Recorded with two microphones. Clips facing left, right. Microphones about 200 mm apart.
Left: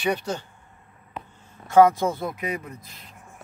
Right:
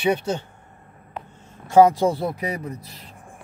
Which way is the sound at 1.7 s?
30° right (ahead or behind).